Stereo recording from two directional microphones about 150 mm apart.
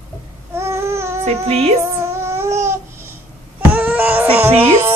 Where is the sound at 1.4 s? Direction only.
45° right (ahead or behind).